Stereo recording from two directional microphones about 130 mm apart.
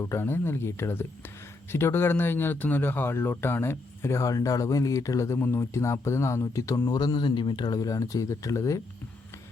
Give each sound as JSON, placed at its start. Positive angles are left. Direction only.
{"t": 0.0, "sound": "speech", "side_deg": 20}